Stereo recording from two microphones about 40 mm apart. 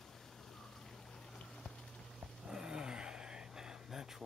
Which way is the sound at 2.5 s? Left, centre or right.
Centre.